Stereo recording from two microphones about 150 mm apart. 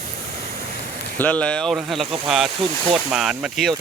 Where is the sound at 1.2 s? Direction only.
10° left (ahead or behind).